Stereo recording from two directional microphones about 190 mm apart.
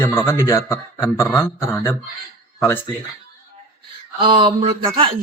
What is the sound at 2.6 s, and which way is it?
Speech, 10° left (ahead or behind).